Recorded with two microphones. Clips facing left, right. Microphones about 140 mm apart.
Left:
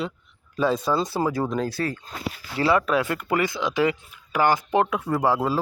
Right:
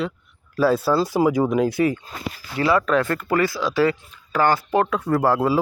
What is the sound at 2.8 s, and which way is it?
Speech, 10° left (ahead or behind).